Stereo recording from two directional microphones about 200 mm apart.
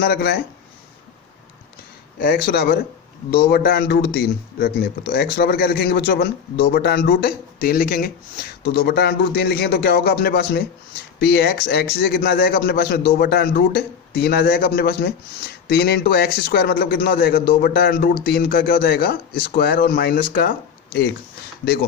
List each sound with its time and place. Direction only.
0.0 s a man's voice: 50° left (ahead or behind)
2.1 s a man's voice: 50° left (ahead or behind)